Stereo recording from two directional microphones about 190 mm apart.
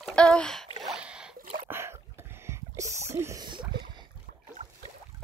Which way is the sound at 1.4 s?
40° right (ahead or behind).